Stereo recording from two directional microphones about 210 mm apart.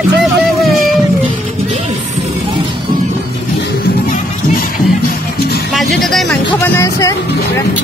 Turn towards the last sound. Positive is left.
turn(degrees=15)  # may be behind; listen again after turning